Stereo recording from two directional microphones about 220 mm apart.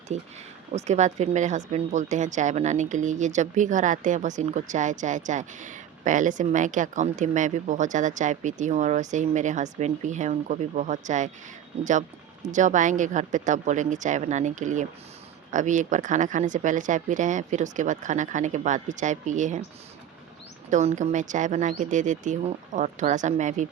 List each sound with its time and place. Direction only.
0.1 s speech: 30° right (ahead or behind)
20.7 s speech: 35° right (ahead or behind)